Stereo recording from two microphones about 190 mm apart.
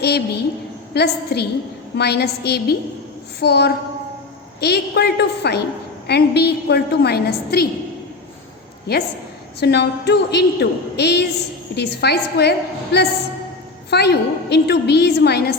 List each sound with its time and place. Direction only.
0.0 s a woman's voice: 60° left (ahead or behind)
9.6 s a woman's voice: 60° left (ahead or behind)